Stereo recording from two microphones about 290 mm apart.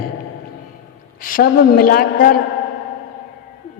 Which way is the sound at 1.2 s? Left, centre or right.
Left.